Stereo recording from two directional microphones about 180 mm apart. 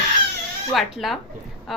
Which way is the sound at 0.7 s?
Centre (ahead or behind).